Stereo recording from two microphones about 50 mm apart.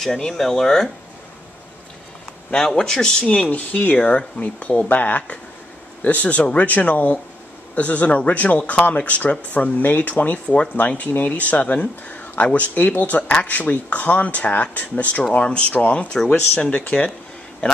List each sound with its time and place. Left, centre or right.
0.0 s speech: centre
2.5 s speech: centre; by 4.0 s left
4.0 s speech: left
15.7 s speech: left